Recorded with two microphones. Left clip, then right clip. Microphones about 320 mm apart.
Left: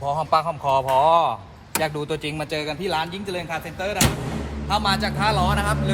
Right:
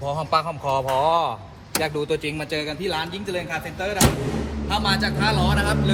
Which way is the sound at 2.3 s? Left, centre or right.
Left.